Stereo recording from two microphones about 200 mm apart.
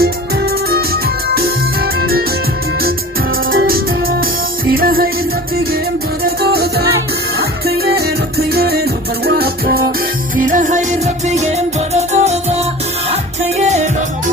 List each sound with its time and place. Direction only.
2.0 s music: 50° right (ahead or behind)
3.5 s music: 50° right (ahead or behind)
6.2 s music: 50° right (ahead or behind); by 12.5 s 35° right (ahead or behind)
13.6 s music: 35° right (ahead or behind)